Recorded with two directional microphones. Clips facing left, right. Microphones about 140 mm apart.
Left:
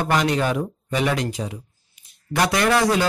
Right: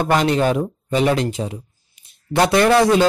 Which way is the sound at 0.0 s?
25° right (ahead or behind).